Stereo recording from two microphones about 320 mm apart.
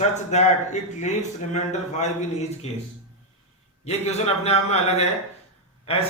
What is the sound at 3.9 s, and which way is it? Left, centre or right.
A man's voice, centre.